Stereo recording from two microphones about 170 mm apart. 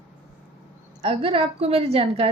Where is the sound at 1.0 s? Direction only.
35° right (ahead or behind).